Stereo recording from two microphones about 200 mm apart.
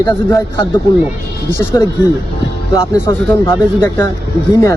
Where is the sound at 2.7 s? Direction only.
20° left (ahead or behind).